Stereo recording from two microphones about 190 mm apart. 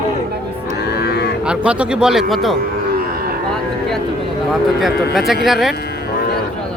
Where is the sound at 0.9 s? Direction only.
60° left (ahead or behind).